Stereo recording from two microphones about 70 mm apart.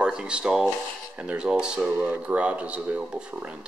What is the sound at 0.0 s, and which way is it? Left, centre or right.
Speech, centre.